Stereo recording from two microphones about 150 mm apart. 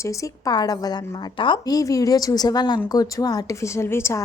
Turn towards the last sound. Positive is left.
turn(degrees=15)  # may be behind; listen again after turning